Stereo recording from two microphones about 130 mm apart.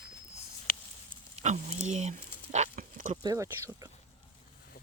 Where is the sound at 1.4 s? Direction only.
60° right (ahead or behind); by 3.1 s 90° right.